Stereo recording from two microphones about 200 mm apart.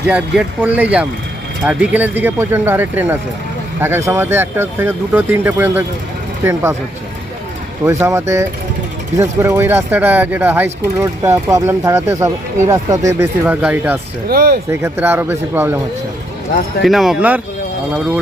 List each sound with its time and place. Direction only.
0.1 s speech: 5° right (ahead or behind)
7.9 s speech: 15° right (ahead or behind)
14.3 s speech: 50° right (ahead or behind)
14.7 s speech: 15° right (ahead or behind)
16.8 s speech: centre (ahead or behind)